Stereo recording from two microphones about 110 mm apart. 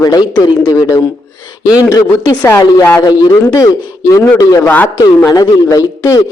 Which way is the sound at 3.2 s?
35° left (ahead or behind).